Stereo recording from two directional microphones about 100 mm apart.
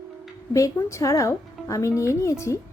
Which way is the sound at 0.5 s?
30° left (ahead or behind).